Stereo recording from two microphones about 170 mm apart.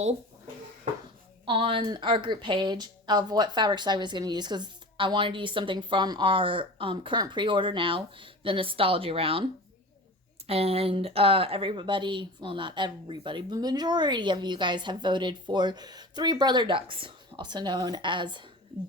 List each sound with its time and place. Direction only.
1.5 s speech: 30° right (ahead or behind)
10.4 s speech: 35° right (ahead or behind)